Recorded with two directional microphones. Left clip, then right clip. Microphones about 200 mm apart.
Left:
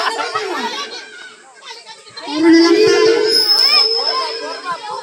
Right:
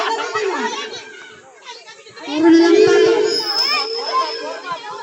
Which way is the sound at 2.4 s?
35° right (ahead or behind).